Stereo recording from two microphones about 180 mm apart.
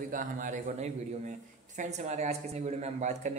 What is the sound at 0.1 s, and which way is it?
A man's voice, 45° right (ahead or behind).